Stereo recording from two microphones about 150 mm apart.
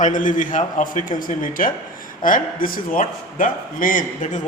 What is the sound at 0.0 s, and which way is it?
A man's voice, 60° left (ahead or behind).